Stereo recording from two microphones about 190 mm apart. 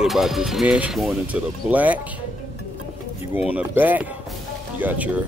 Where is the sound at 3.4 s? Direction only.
10° right (ahead or behind).